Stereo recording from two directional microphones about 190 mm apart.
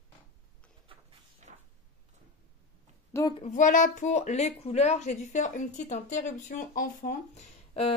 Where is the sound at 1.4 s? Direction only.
40° right (ahead or behind).